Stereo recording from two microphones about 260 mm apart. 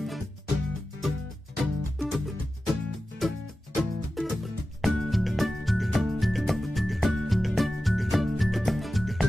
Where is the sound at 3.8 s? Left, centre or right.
Centre.